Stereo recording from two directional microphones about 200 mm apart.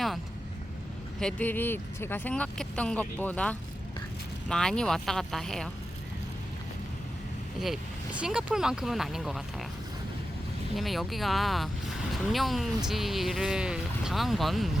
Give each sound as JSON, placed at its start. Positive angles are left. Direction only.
{"t": 1.2, "sound": "speech", "side_deg": 10}
{"t": 8.2, "sound": "speech", "side_deg": -5}
{"t": 10.8, "sound": "speech", "side_deg": 0}